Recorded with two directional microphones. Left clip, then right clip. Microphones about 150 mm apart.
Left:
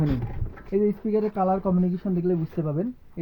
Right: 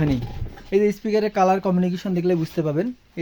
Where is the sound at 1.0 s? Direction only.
70° right (ahead or behind); by 2.8 s 90° right.